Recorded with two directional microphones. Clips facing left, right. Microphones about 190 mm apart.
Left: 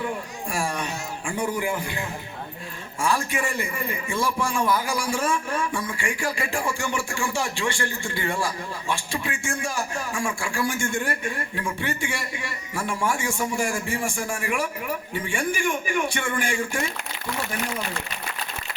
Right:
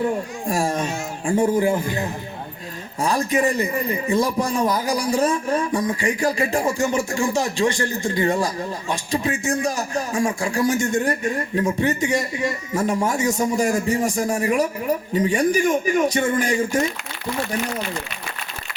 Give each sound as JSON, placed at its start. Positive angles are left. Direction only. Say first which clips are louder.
{"t": 0.0, "sound": "speech", "louder": "right 7 dB", "side_deg": -40}